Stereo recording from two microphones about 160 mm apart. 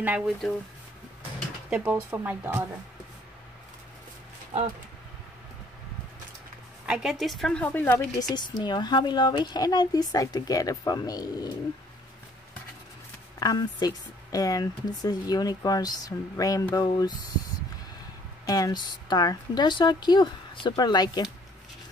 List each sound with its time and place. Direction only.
0.0 s speech: 5° right (ahead or behind)
1.7 s speech: 10° right (ahead or behind)
6.9 s speech: 5° right (ahead or behind)
8.2 s a child's voice: 25° left (ahead or behind)
13.4 s a child's voice: 25° left (ahead or behind)
18.4 s a child's voice: 25° left (ahead or behind)